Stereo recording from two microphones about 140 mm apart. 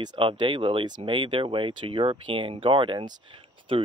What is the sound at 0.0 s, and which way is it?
Speech, 35° right (ahead or behind).